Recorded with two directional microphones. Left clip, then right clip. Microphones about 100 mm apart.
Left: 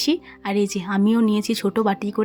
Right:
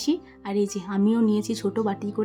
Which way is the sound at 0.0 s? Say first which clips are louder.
Left 4 dB; 35° left (ahead or behind).